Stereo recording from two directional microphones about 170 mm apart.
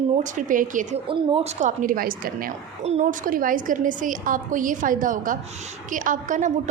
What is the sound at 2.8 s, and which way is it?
A woman's voice, 40° right (ahead or behind).